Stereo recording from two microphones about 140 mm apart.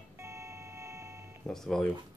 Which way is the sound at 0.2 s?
20° right (ahead or behind).